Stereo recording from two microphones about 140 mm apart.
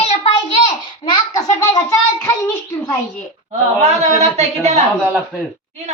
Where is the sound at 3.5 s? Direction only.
55° right (ahead or behind).